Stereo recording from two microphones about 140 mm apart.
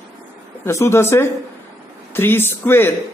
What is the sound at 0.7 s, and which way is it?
Speech, 20° left (ahead or behind).